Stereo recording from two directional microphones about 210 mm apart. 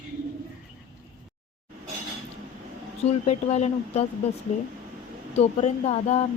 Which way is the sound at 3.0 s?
30° left (ahead or behind).